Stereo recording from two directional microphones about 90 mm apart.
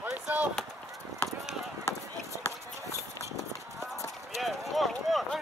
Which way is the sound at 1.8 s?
35° left (ahead or behind).